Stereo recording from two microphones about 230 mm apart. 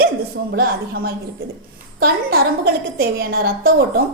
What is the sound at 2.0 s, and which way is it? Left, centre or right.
A woman's voice, right.